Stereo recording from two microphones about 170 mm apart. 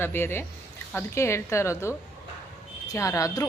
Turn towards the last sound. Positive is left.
turn(degrees=20)  # may be behind; listen again after turning